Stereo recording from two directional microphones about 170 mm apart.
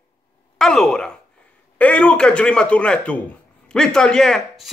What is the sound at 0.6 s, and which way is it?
Speech, 5° left (ahead or behind).